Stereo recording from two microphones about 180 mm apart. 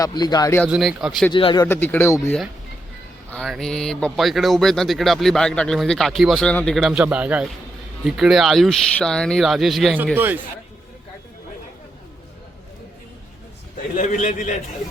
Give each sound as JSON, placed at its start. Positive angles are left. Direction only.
{"t": 0.0, "sound": "speech", "side_deg": 20}
{"t": 0.7, "sound": "speech", "side_deg": 0}
{"t": 1.3, "sound": "speech", "side_deg": 25}
{"t": 1.6, "sound": "speech", "side_deg": 10}
{"t": 3.2, "sound": "speech", "side_deg": 5}
{"t": 13.9, "sound": "a man's voice", "side_deg": 45}